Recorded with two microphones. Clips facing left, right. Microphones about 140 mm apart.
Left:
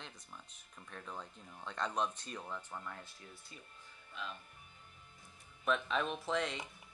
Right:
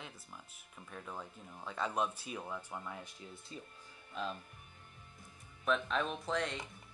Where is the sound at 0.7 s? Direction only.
5° right (ahead or behind).